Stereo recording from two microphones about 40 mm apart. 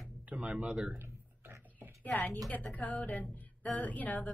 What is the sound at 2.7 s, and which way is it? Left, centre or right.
Speech, left.